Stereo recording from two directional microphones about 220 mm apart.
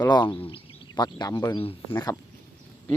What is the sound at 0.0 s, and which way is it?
Speech, 20° left (ahead or behind).